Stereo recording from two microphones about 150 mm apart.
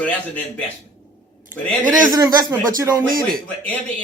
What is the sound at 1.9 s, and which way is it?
Speech, 25° right (ahead or behind).